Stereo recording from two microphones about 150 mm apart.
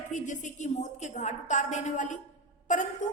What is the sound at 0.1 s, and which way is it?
A woman's voice, 55° left (ahead or behind).